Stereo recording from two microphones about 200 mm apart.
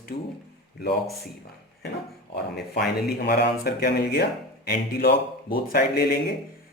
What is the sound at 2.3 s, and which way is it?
Speech, 55° left (ahead or behind).